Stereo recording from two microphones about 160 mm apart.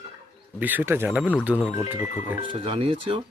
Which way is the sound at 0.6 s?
10° right (ahead or behind).